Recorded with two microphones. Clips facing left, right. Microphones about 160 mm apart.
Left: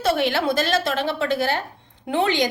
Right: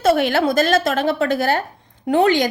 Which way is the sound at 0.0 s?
45° right (ahead or behind).